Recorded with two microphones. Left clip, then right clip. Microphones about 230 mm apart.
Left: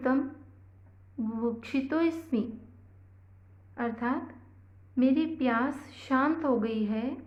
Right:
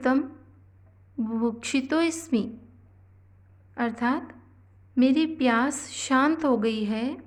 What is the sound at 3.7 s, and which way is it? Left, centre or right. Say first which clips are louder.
A woman's voice: right 5 dB; right.